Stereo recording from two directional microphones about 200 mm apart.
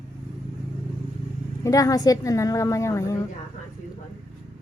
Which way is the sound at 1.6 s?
15° left (ahead or behind).